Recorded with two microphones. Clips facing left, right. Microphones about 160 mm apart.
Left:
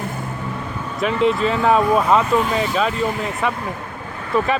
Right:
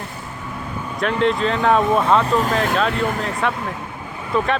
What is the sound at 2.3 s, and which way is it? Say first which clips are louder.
Speech: left 1 dB; 35° right (ahead or behind).